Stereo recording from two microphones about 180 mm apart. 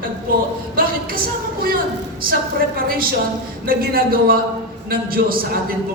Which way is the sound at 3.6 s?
55° right (ahead or behind).